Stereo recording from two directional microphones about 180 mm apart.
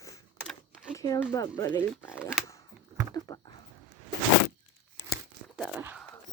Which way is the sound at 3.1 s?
20° left (ahead or behind).